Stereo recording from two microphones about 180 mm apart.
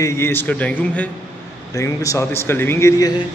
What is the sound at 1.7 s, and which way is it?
Speech, 20° left (ahead or behind).